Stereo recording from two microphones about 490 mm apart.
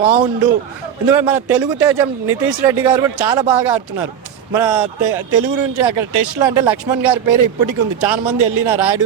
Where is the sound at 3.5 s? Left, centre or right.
Right.